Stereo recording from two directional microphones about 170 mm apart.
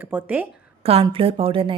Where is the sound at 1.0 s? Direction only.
35° right (ahead or behind).